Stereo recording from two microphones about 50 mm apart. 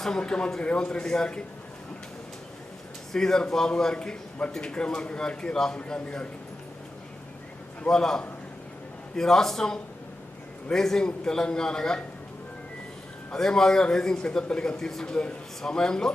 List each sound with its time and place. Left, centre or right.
0.0 s a man's voice: centre
3.1 s a man's voice: centre
7.9 s a man's voice: centre
13.3 s a man's voice: centre